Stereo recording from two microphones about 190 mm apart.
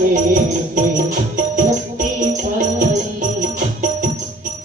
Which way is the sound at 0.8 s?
45° right (ahead or behind).